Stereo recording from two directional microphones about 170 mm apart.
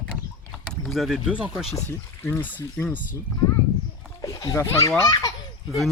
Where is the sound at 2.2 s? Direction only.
15° left (ahead or behind).